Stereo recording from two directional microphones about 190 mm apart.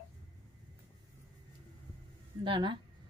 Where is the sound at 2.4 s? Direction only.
25° right (ahead or behind).